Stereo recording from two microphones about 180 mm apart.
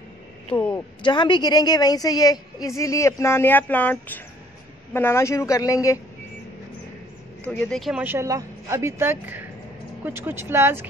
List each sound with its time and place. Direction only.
0.5 s a woman's voice: 10° left (ahead or behind)
1.0 s a woman's voice: 25° left (ahead or behind)
7.4 s speech: 5° left (ahead or behind); by 10.9 s 15° right (ahead or behind)